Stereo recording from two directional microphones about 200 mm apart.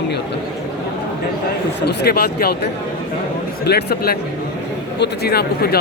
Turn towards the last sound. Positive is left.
turn(degrees=50)  # may be behind; listen again after turning